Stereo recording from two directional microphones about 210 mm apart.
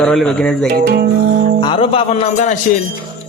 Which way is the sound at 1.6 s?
25° left (ahead or behind).